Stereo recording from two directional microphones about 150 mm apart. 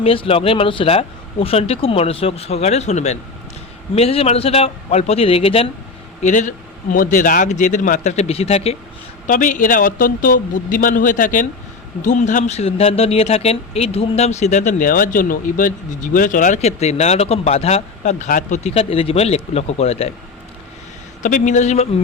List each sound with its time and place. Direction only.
0.0 s speech: 40° left (ahead or behind)
6.2 s speech: 55° left (ahead or behind)
6.9 s a man's voice: 65° left (ahead or behind); by 8.7 s 40° left (ahead or behind)
9.2 s a man's voice: 60° left (ahead or behind); by 20.1 s 45° left (ahead or behind)
21.2 s speech: 60° left (ahead or behind)